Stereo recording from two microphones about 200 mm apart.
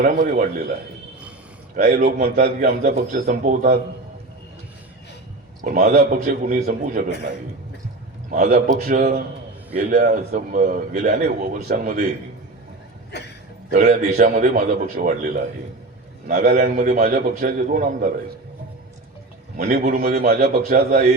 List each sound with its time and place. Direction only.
0.0 s speech: 40° right (ahead or behind)
1.7 s a man's voice: 50° right (ahead or behind)
5.6 s speech: 35° right (ahead or behind)
5.9 s a man's voice: 50° right (ahead or behind)
8.4 s a man's voice: 50° right (ahead or behind)
8.9 s a man's voice: 40° right (ahead or behind)
13.1 s a sound: 55° left (ahead or behind)
13.7 s a man's voice: 50° right (ahead or behind)
19.5 s a man's voice: 45° right (ahead or behind)